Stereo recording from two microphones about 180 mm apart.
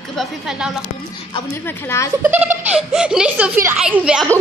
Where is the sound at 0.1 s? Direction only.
Centre (ahead or behind).